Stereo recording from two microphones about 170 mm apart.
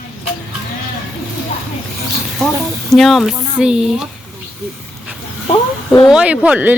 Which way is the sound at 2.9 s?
Centre (ahead or behind).